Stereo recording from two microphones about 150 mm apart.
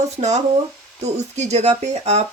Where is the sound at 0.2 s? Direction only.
50° right (ahead or behind).